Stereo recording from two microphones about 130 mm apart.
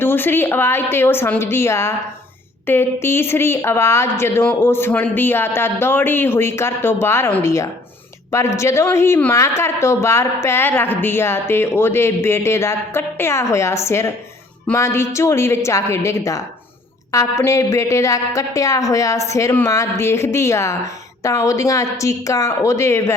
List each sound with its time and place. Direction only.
0.0 s a woman's voice: 15° left (ahead or behind)